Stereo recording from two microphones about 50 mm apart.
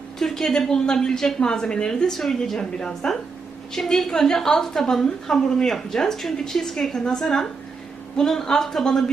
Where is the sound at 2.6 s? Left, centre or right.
Centre.